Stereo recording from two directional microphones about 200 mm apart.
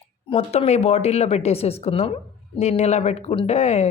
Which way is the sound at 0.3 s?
30° left (ahead or behind).